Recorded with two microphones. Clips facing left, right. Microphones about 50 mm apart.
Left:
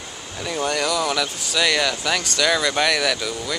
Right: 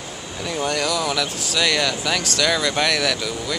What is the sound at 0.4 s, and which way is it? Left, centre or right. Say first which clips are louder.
Speech: even; centre.